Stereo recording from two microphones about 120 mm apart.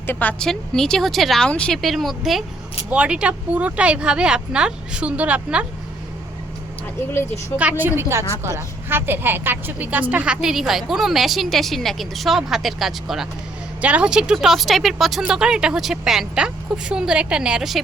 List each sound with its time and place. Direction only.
0.1 s a woman's voice: 15° left (ahead or behind); by 5.6 s 10° right (ahead or behind)
7.5 s a woman's voice: 15° right (ahead or behind)